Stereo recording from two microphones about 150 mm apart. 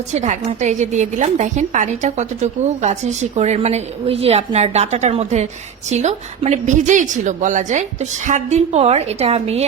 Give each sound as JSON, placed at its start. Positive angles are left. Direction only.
{"t": 0.1, "sound": "a woman's voice", "side_deg": -50}